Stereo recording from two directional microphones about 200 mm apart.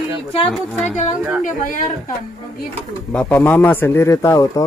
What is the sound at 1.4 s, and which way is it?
Speech, 40° left (ahead or behind).